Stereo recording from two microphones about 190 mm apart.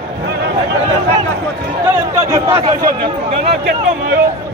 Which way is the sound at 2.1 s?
15° right (ahead or behind).